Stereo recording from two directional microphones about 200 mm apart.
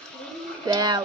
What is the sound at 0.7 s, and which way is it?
Speech, 20° right (ahead or behind).